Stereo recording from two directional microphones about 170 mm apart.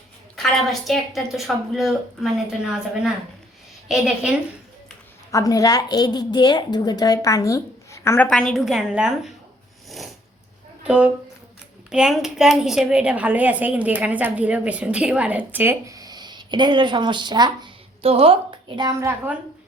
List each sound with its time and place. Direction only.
0.7 s speech: centre (ahead or behind)
5.3 s a woman's voice: 20° left (ahead or behind)
8.3 s speech: 5° left (ahead or behind)
10.8 s a woman's voice: 5° right (ahead or behind); by 18.3 s 35° right (ahead or behind)
18.8 s a woman's voice: 20° right (ahead or behind)